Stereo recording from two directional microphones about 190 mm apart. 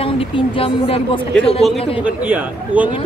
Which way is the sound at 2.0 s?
10° right (ahead or behind).